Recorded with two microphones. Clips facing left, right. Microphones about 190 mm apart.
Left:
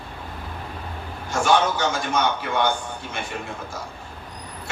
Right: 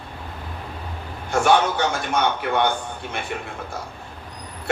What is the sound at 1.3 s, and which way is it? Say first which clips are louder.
Speech: right 2 dB; 60° right (ahead or behind).